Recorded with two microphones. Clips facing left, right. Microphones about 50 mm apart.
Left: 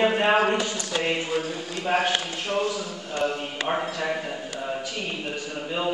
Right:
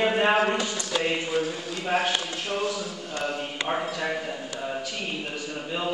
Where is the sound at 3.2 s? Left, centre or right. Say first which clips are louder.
Left 3 dB; centre.